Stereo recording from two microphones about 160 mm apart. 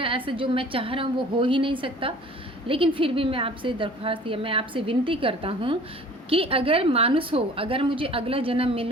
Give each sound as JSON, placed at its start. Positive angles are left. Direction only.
{"t": 0.0, "sound": "a woman's voice", "side_deg": -35}